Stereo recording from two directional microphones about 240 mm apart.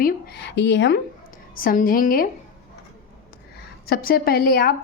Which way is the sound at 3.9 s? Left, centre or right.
Left.